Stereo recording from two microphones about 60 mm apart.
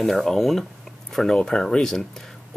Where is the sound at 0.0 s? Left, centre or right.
Centre.